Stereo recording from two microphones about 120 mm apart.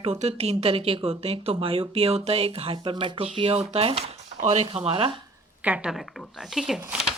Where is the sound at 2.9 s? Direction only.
45° right (ahead or behind).